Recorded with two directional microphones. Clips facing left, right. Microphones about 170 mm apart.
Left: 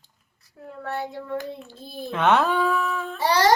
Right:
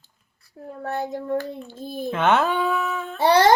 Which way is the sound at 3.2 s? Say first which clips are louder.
Right 4 dB; 55° right (ahead or behind).